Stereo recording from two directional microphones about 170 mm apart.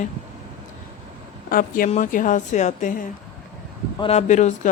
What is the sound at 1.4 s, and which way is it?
Speech, 55° left (ahead or behind).